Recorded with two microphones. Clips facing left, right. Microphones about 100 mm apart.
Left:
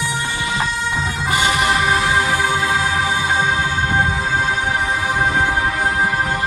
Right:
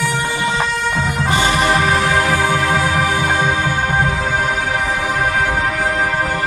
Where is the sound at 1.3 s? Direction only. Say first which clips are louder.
Right 2 dB; 35° right (ahead or behind).